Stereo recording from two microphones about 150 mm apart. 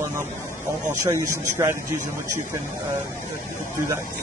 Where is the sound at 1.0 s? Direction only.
20° right (ahead or behind).